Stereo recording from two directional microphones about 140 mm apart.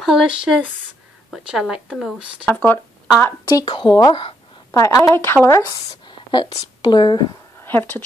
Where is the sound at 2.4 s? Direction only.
10° left (ahead or behind).